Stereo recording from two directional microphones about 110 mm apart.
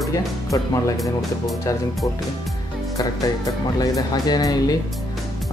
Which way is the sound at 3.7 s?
30° left (ahead or behind).